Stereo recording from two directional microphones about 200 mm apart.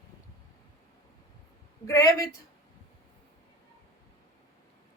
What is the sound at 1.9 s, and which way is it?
Speech, 15° left (ahead or behind).